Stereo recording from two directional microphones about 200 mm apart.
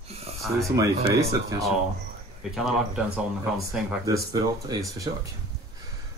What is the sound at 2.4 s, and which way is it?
Speech, 5° right (ahead or behind).